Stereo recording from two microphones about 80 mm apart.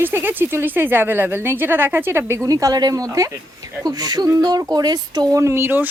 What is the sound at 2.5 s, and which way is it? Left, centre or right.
Speech, right.